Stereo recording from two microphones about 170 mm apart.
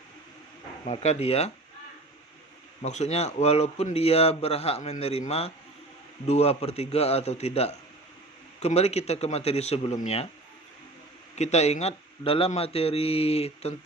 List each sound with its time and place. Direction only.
0.9 s a man's voice: 40° left (ahead or behind)
2.8 s a man's voice: 40° left (ahead or behind)
11.3 s a man's voice: 40° left (ahead or behind)